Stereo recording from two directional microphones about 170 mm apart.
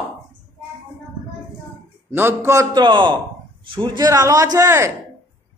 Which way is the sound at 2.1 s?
15° right (ahead or behind).